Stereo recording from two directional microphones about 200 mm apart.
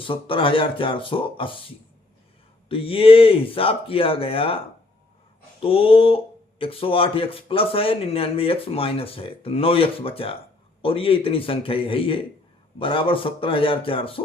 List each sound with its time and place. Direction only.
0.0 s speech: 25° left (ahead or behind)
5.6 s speech: 30° left (ahead or behind)